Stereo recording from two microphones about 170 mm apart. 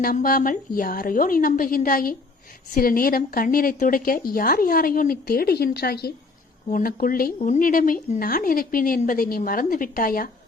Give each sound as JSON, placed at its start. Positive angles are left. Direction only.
{"t": 0.0, "sound": "a woman's voice", "side_deg": 55}
{"t": 6.7, "sound": "a woman's voice", "side_deg": 55}
{"t": 7.3, "sound": "a woman's voice", "side_deg": 45}